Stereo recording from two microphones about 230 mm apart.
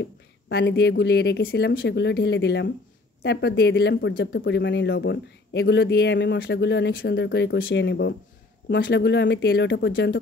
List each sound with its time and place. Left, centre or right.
0.0 s speech: left